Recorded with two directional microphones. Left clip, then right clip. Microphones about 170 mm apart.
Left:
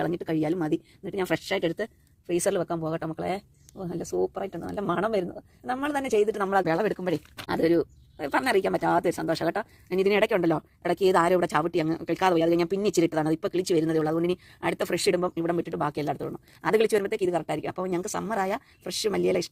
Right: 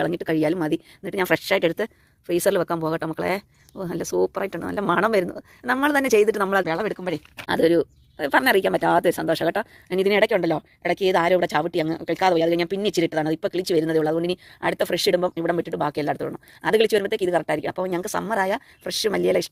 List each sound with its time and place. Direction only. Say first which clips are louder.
0.0 s speech: right 5 dB; 25° right (ahead or behind)
6.7 s speech: right 1 dB; 10° left (ahead or behind)
7.4 s speech: right 5 dB; 20° right (ahead or behind)